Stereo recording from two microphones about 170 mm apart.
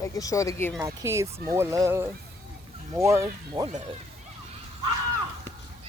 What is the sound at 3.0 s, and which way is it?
Speech, 15° right (ahead or behind).